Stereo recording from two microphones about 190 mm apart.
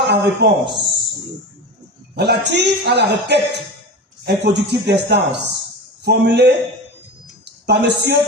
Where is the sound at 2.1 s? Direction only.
60° right (ahead or behind).